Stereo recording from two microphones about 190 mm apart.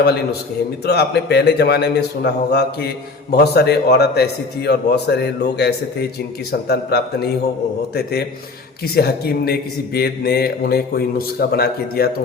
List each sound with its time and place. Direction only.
0.0 s a man's voice: 55° left (ahead or behind)